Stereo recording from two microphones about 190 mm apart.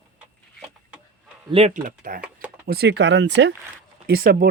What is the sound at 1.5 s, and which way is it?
Speech, 35° right (ahead or behind).